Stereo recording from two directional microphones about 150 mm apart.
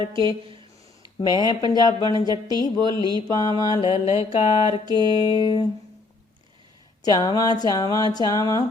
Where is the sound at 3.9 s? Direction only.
40° left (ahead or behind).